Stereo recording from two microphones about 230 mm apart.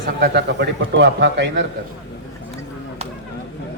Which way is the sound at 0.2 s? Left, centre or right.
Right.